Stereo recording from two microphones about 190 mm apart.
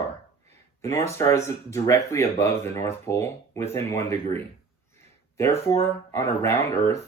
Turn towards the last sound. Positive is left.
turn(degrees=15)  # may be behind; listen again after turning